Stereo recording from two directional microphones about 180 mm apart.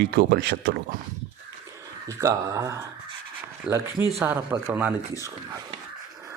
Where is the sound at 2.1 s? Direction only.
15° right (ahead or behind).